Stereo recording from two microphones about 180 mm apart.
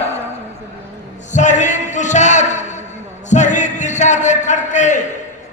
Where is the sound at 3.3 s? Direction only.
40° left (ahead or behind).